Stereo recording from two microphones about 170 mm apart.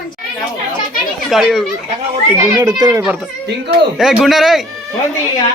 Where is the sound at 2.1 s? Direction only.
25° right (ahead or behind).